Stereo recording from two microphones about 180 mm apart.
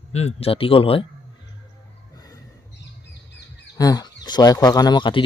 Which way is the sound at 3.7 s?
20° left (ahead or behind).